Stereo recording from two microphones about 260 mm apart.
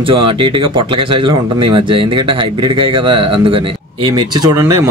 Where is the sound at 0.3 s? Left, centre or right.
Centre.